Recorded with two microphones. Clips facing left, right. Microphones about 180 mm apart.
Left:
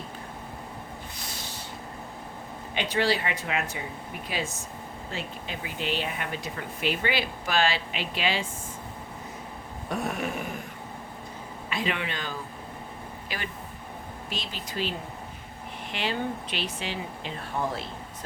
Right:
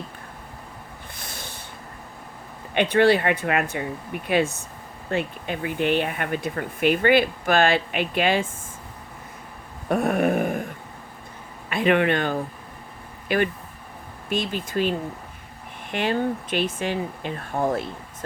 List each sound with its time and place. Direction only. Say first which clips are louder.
1.2 s snort: right 1 dB; 55° right (ahead or behind)
2.7 s speech: right 9 dB; 55° right (ahead or behind)
9.9 s a sound: right 10 dB; 55° right (ahead or behind)
11.7 s speech: right 11 dB; 55° right (ahead or behind)